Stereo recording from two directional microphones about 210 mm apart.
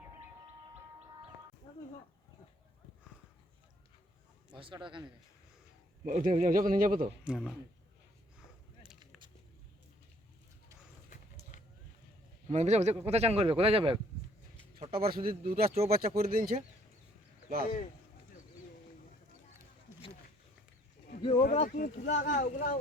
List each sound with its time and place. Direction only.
1.7 s chicken: 25° left (ahead or behind)
4.5 s speech: 25° right (ahead or behind)
6.1 s speech: 40° right (ahead or behind)
7.3 s speech: centre (ahead or behind)
12.5 s speech: 35° right (ahead or behind)
15.0 s speech: 45° right (ahead or behind)
21.2 s speech: 30° left (ahead or behind)
21.4 s speech: 40° left (ahead or behind)